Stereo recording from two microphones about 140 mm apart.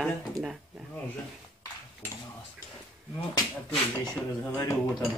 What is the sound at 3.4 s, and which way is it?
Speech, 30° left (ahead or behind).